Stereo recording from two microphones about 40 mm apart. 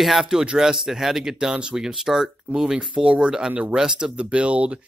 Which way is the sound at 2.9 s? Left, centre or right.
Right.